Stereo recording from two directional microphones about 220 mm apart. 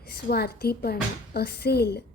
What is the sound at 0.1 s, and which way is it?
A woman's voice, 45° left (ahead or behind).